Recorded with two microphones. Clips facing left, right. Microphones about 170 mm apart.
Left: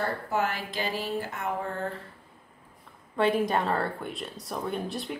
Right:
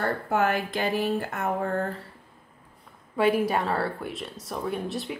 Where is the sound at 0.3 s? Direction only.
55° right (ahead or behind).